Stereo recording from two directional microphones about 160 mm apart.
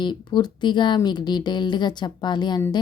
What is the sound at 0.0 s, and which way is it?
A woman's voice, 30° left (ahead or behind).